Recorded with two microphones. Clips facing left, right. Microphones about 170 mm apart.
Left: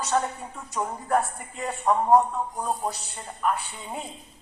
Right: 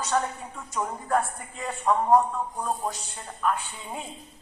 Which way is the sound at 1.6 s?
20° left (ahead or behind).